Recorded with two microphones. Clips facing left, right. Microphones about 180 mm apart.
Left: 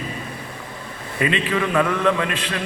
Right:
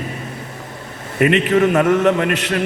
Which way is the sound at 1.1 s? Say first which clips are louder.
Right 7 dB; 45° right (ahead or behind).